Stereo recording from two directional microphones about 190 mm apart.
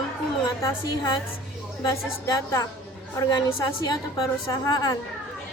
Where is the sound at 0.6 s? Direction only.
20° left (ahead or behind).